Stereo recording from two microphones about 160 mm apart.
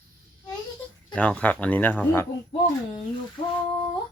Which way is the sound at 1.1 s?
5° left (ahead or behind).